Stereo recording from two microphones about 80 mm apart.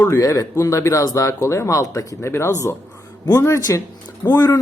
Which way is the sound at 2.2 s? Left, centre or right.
Left.